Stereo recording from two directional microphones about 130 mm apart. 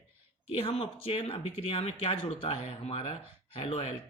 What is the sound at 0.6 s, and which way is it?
Speech, 45° left (ahead or behind).